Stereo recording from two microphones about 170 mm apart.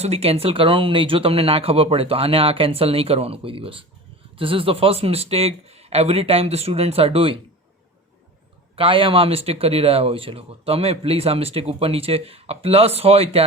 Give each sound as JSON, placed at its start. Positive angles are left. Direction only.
{"t": 0.0, "sound": "speech", "side_deg": -40}
{"t": 8.7, "sound": "speech", "side_deg": -30}